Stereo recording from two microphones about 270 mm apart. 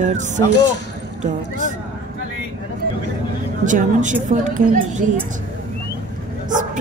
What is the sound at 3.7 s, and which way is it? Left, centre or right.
Speech, right.